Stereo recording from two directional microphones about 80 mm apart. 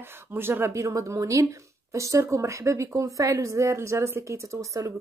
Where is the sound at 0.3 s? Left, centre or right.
Right.